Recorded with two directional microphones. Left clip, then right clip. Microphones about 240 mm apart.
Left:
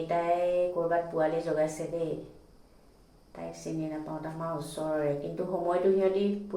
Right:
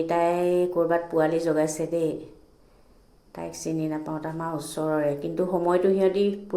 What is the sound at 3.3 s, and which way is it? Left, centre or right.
Speech, right.